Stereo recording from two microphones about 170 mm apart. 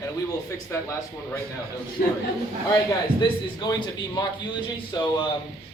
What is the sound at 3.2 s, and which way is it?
Speech, 25° left (ahead or behind).